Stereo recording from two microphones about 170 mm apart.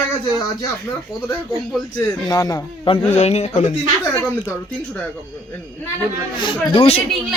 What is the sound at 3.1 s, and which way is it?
Speech, 40° left (ahead or behind).